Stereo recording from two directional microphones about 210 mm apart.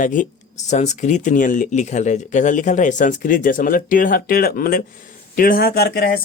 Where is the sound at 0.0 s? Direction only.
40° left (ahead or behind).